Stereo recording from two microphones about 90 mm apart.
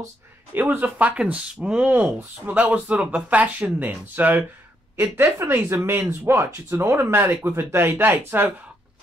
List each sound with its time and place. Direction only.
0.6 s speech: 20° right (ahead or behind)